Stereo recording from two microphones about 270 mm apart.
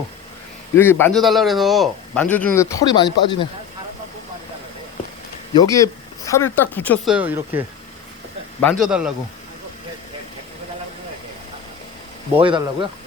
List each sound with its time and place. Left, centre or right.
0.8 s speech: centre
5.5 s speech: centre
8.8 s a man's voice: centre
12.3 s speech: centre